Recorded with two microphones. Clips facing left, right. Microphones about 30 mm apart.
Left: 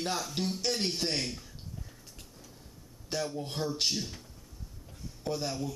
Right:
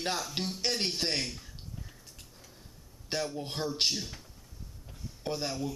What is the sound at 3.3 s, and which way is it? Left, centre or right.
Speech, centre.